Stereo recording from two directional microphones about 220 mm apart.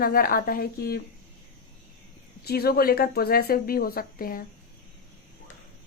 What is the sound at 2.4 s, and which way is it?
Speech, 45° left (ahead or behind).